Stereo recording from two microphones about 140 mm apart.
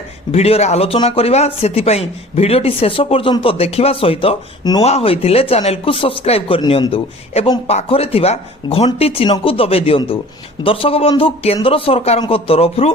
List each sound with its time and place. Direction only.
0.3 s speech: 45° left (ahead or behind)